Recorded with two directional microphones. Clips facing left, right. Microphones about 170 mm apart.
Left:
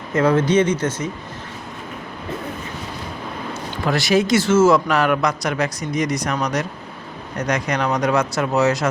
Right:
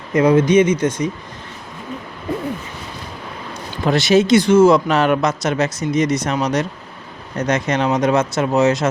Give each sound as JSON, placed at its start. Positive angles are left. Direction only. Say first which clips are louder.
{"t": 0.1, "sound": "speech", "louder": "right 4 dB", "side_deg": -15}
{"t": 3.8, "sound": "speech", "louder": "right 4 dB", "side_deg": -20}